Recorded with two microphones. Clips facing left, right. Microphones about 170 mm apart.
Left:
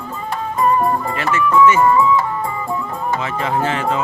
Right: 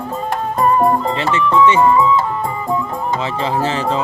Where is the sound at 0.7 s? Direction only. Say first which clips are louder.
Right 3 dB; 25° right (ahead or behind).